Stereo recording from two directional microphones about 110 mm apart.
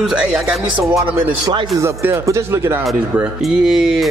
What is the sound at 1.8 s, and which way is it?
Speech, 25° right (ahead or behind).